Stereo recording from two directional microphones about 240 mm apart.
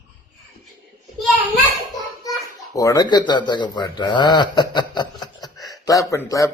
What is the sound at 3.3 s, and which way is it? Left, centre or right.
A man's voice, centre.